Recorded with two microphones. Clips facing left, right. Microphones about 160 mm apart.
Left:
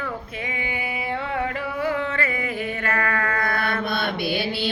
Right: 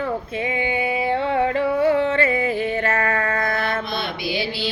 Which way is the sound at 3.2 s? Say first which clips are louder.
Right 3 dB; 25° right (ahead or behind).